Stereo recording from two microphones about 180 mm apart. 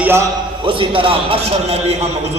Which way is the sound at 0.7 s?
30° right (ahead or behind).